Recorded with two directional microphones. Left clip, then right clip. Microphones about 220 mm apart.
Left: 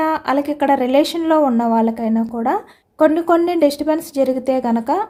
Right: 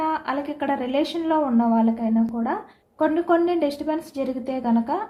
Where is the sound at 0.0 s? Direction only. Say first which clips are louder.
Left 7 dB; 55° left (ahead or behind).